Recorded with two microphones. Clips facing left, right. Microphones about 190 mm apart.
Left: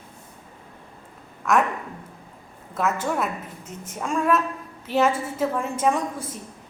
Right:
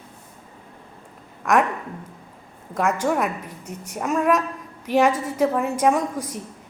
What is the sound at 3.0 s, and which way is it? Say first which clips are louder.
A woman's voice: right 4 dB; 10° right (ahead or behind).